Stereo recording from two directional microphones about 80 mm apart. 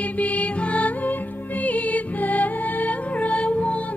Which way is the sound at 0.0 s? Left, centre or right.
Centre.